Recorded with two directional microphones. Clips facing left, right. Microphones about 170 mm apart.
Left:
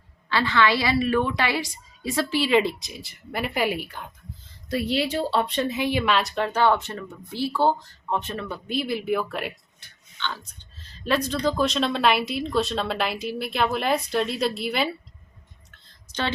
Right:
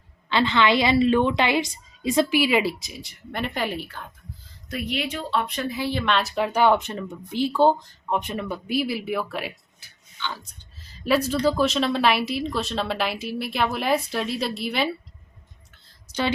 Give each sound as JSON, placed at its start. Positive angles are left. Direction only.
{"t": 0.3, "sound": "a woman's voice", "side_deg": -20}
{"t": 4.7, "sound": "speech", "side_deg": 30}